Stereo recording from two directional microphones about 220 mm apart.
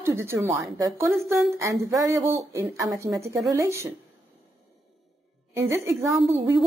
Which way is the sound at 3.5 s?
15° right (ahead or behind).